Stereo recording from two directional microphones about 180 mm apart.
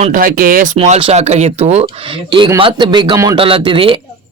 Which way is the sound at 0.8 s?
30° right (ahead or behind).